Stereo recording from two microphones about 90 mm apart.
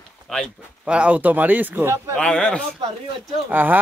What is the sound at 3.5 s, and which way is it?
Speech, 20° right (ahead or behind).